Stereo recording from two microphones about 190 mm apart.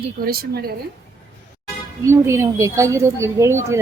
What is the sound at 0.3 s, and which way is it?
Speech, 55° right (ahead or behind).